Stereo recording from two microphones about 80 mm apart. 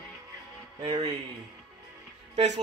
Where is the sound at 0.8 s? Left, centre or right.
Right.